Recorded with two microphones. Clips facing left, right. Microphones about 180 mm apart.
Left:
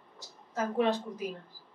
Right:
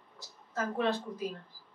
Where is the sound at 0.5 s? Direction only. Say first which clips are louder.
Left 3 dB; 15° left (ahead or behind).